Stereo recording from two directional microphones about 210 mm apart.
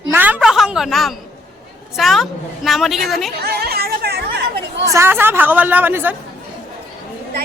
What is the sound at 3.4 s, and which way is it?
Chatter, 50° right (ahead or behind).